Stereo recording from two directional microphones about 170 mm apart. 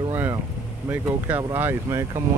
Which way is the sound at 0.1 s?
15° right (ahead or behind).